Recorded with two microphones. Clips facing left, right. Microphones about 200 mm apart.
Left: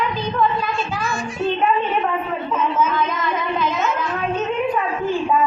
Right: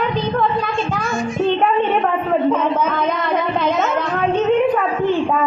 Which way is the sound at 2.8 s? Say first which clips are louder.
Right 2 dB; 60° right (ahead or behind).